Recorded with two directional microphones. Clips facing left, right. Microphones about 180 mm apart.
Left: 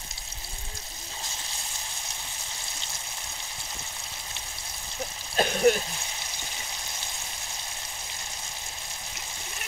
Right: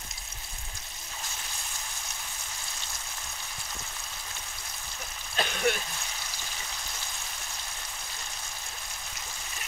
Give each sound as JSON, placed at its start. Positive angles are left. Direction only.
{"t": 5.3, "sound": "throat clearing", "side_deg": 40}